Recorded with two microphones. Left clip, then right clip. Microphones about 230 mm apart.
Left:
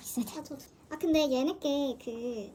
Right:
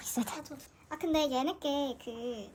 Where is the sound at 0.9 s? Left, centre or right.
Centre.